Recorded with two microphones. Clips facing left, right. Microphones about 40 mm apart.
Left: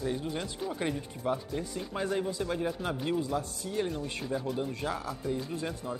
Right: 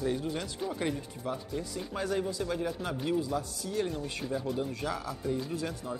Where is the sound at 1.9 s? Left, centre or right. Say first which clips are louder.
Even; centre.